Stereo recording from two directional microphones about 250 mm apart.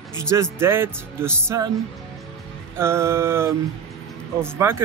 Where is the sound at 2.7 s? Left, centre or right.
Centre.